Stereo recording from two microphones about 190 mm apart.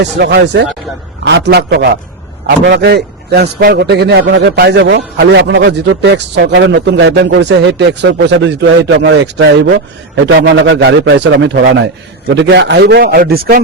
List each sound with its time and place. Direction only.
0.0 s a man's voice: 60° right (ahead or behind)
2.5 s a man's voice: 70° right (ahead or behind); by 13.6 s 55° right (ahead or behind)